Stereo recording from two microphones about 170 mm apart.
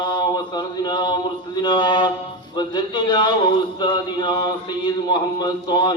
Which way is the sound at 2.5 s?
25° left (ahead or behind).